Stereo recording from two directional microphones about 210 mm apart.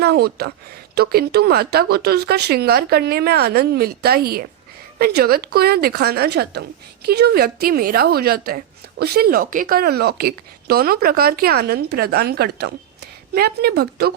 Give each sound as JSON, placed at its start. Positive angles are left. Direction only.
{"t": 0.0, "sound": "a woman's voice", "side_deg": -50}